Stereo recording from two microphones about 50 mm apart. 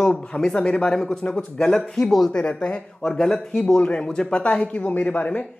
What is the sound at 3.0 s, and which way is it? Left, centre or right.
Speech, centre.